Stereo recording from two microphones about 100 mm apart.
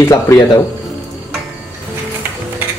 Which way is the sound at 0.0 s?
30° left (ahead or behind).